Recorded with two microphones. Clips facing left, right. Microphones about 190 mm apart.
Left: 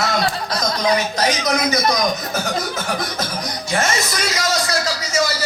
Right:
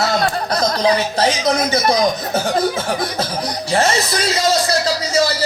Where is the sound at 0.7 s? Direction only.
30° right (ahead or behind).